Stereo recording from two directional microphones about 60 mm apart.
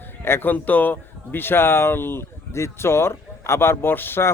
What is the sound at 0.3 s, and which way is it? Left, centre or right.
Speech, left.